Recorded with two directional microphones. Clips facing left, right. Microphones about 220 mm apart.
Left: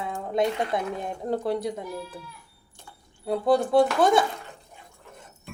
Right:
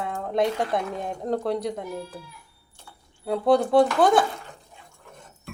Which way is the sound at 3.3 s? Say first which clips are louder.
Right 2 dB; centre (ahead or behind).